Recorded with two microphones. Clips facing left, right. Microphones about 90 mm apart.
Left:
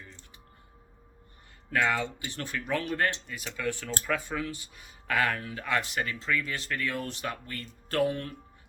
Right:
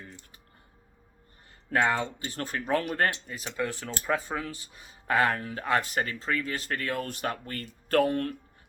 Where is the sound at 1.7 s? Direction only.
30° right (ahead or behind).